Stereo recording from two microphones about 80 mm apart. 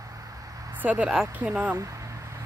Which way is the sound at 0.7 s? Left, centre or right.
Centre.